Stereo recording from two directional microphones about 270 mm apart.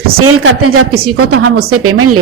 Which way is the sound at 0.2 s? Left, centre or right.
Right.